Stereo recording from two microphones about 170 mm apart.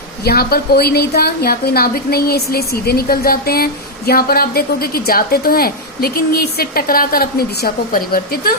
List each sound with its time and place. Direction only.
0.3 s a woman's voice: 65° left (ahead or behind)